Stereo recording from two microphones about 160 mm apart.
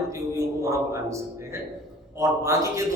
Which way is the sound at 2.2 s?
20° right (ahead or behind).